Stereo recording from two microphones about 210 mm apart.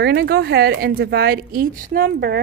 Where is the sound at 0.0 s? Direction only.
50° right (ahead or behind).